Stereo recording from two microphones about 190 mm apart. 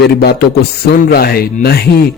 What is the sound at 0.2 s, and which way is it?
Speech, 55° left (ahead or behind).